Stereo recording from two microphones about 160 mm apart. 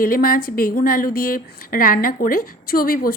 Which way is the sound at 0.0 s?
65° left (ahead or behind).